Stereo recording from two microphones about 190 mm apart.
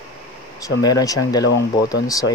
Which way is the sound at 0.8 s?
20° left (ahead or behind).